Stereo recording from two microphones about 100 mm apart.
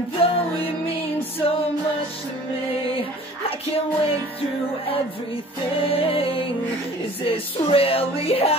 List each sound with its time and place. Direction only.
0.2 s music: 70° left (ahead or behind)
2.9 s music: 70° left (ahead or behind)
5.8 s music: 70° left (ahead or behind)